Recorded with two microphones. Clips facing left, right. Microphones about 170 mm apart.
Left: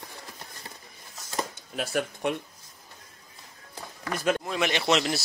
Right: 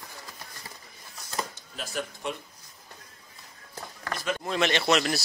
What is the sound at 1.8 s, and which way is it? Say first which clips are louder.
Speech: left 6 dB; 60° left (ahead or behind).